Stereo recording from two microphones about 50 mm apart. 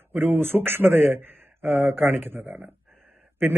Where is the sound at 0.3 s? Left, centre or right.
Right.